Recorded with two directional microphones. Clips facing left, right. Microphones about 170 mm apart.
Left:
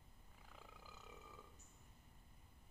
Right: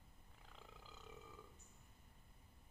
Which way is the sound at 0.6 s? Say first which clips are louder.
Even; 10° left (ahead or behind).